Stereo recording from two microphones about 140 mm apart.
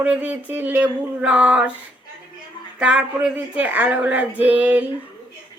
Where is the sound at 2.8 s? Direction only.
10° right (ahead or behind).